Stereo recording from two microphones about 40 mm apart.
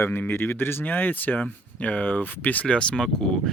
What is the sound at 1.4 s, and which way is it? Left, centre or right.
Speech, left.